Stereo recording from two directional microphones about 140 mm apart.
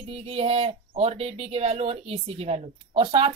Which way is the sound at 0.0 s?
45° right (ahead or behind).